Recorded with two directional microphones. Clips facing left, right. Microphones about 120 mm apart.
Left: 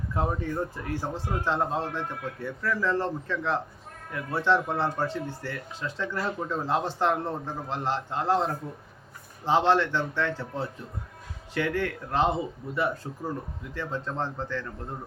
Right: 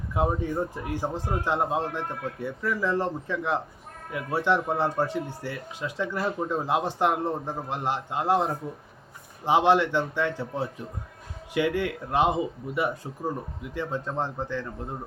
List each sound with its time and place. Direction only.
0.1 s speech: 15° right (ahead or behind)